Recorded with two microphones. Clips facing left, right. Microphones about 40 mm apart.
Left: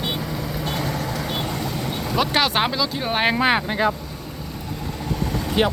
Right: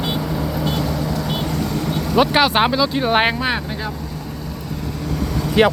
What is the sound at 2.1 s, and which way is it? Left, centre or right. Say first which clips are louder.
Speech: right 5 dB; centre.